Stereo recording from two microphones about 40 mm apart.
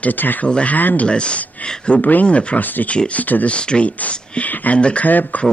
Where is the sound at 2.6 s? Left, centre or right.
Left.